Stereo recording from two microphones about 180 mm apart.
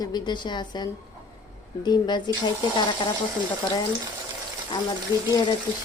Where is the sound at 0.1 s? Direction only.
25° left (ahead or behind).